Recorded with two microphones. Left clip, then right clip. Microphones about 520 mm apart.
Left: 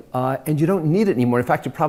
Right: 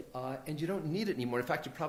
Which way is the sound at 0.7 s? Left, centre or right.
Left.